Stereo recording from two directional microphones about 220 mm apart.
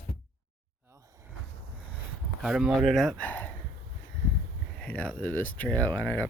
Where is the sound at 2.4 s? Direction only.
Centre (ahead or behind).